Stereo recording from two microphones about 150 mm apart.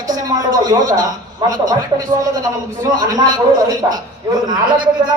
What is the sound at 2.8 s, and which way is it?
A man's voice, 25° right (ahead or behind).